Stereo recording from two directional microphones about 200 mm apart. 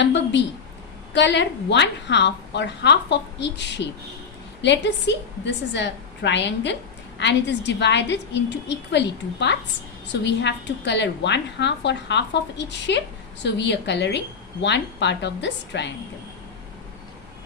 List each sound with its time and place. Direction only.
0.0 s a woman's voice: 60° left (ahead or behind)